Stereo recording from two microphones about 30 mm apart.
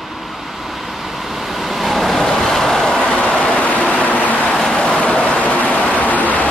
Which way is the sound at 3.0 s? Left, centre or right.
Left.